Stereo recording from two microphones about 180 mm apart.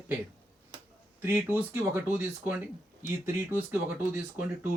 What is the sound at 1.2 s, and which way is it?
Speech, 10° right (ahead or behind).